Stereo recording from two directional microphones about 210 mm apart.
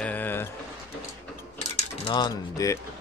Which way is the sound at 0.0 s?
10° left (ahead or behind).